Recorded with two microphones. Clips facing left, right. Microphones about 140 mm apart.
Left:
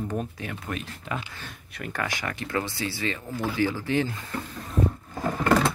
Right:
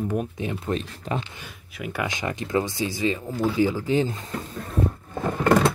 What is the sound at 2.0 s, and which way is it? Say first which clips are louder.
Speech: right 4 dB; 20° right (ahead or behind).